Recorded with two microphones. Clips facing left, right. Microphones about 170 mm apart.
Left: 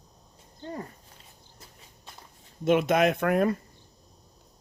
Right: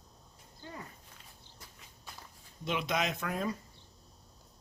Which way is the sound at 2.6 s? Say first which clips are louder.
Left 11 dB; 50° left (ahead or behind).